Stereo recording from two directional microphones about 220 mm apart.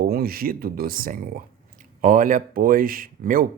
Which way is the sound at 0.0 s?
45° right (ahead or behind).